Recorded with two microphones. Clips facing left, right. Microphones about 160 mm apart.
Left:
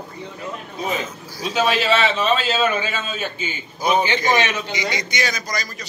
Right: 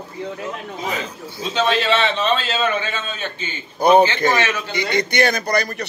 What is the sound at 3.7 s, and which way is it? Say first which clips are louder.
Speech: right 7 dB; 60° right (ahead or behind).